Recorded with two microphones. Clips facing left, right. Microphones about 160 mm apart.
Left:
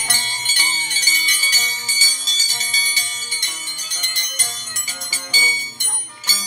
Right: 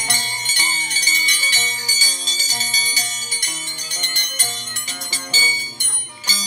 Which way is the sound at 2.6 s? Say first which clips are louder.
Right 1 dB; 40° right (ahead or behind).